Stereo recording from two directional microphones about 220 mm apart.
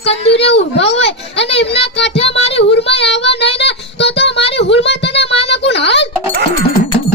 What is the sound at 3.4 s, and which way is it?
Music, 50° left (ahead or behind).